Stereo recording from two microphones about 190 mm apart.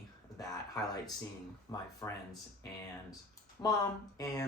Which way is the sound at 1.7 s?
15° left (ahead or behind).